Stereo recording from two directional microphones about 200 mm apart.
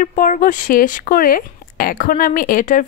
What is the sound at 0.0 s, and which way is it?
Speech, 45° left (ahead or behind).